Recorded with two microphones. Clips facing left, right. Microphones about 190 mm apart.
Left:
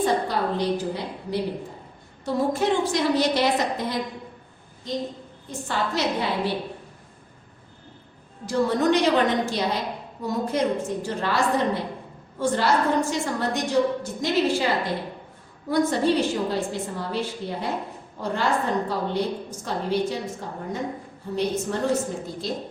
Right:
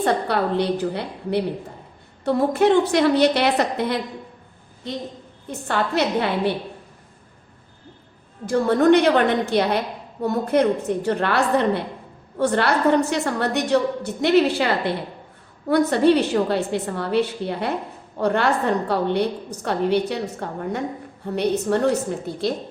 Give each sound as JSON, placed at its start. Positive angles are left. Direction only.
{"t": 0.0, "sound": "a woman's voice", "side_deg": -65}
{"t": 5.5, "sound": "a woman's voice", "side_deg": -60}
{"t": 8.4, "sound": "a woman's voice", "side_deg": -55}